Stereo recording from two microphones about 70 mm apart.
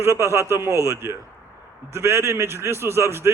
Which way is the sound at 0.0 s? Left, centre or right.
Right.